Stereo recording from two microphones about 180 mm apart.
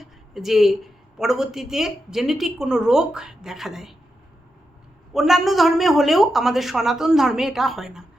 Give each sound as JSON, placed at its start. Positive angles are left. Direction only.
{"t": 0.0, "sound": "a woman's voice", "side_deg": 0}
{"t": 5.1, "sound": "a woman's voice", "side_deg": 0}